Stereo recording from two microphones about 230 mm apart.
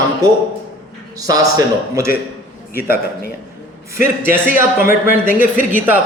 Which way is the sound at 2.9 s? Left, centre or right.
Left.